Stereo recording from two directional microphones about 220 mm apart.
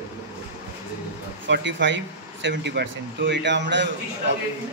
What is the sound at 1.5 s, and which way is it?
Speech, 55° right (ahead or behind).